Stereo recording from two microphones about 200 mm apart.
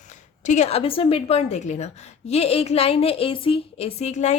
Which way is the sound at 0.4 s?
35° left (ahead or behind).